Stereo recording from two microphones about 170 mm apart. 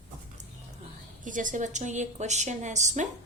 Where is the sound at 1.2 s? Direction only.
50° right (ahead or behind).